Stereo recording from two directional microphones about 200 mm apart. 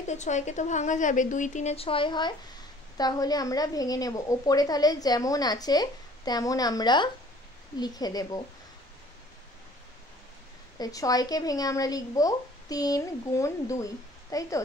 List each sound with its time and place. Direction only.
0.0 s a woman's voice: 35° left (ahead or behind); by 8.4 s 20° left (ahead or behind)
10.8 s speech: 20° left (ahead or behind)